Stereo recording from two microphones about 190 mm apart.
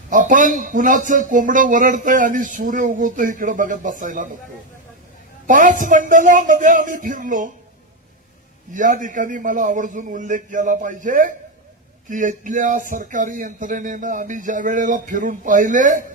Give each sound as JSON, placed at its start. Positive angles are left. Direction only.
{"t": 0.1, "sound": "a man's voice", "side_deg": -45}
{"t": 5.5, "sound": "a man's voice", "side_deg": -45}
{"t": 8.7, "sound": "a man's voice", "side_deg": -40}